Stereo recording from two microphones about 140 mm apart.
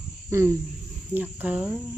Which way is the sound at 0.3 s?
20° right (ahead or behind).